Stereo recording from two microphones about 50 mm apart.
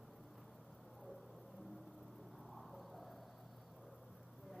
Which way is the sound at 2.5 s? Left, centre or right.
Centre.